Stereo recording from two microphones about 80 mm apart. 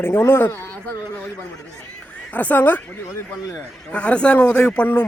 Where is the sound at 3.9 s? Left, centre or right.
Centre.